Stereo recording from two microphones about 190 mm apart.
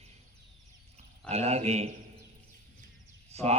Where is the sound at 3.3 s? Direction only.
35° right (ahead or behind).